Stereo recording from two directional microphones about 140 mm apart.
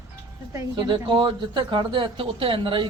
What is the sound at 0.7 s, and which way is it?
Speech, 35° right (ahead or behind).